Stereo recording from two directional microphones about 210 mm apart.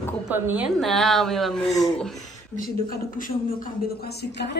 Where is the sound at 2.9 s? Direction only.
40° left (ahead or behind).